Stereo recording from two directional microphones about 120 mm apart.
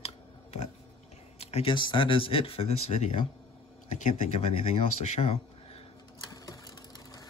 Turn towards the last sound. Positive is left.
turn(degrees=30)  # may be behind; listen again after turning